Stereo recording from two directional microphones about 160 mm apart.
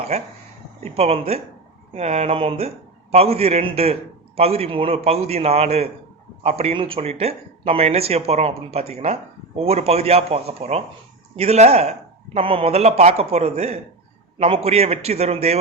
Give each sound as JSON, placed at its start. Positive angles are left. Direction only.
{"t": 0.1, "sound": "speech", "side_deg": -40}